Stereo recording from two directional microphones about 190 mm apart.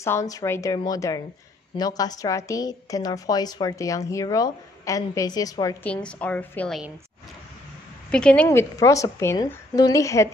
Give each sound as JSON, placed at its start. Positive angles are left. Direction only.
{"t": 0.0, "sound": "a woman's voice", "side_deg": 15}
{"t": 5.9, "sound": "a woman's voice", "side_deg": 5}
{"t": 8.1, "sound": "a woman's voice", "side_deg": 5}
{"t": 8.5, "sound": "a woman's voice", "side_deg": 15}